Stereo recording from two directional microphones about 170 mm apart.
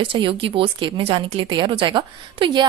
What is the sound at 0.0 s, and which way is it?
A woman's voice, 30° right (ahead or behind).